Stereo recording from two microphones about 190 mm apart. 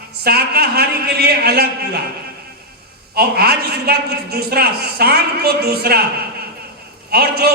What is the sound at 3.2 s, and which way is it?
A man's voice, 55° right (ahead or behind).